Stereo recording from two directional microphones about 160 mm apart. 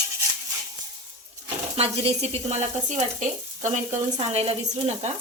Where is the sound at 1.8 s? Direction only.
40° right (ahead or behind).